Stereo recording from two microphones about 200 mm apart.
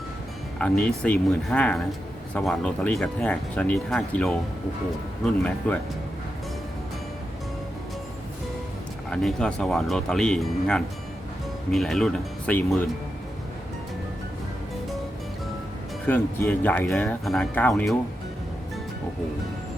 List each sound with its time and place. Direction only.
0.6 s speech: 5° left (ahead or behind)
9.0 s speech: 5° left (ahead or behind)
16.0 s speech: 10° left (ahead or behind)